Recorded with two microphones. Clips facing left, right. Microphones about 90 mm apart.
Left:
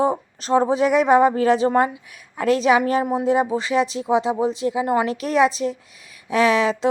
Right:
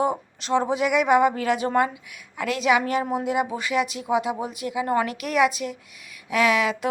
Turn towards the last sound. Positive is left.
turn(degrees=30)  # may be behind; listen again after turning